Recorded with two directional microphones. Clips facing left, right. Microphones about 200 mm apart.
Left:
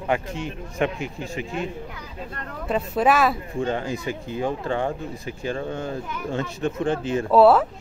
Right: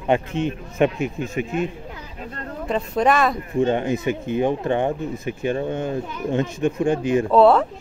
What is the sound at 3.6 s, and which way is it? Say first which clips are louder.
Speech: right 7 dB; 20° right (ahead or behind).